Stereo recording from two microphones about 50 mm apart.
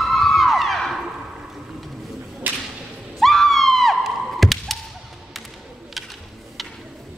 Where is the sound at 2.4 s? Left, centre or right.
Right.